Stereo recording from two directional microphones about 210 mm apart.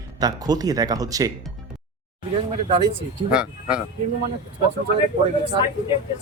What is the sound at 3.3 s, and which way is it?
Speech, 5° right (ahead or behind).